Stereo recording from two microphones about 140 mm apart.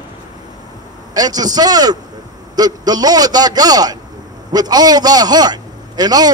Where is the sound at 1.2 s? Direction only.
30° right (ahead or behind).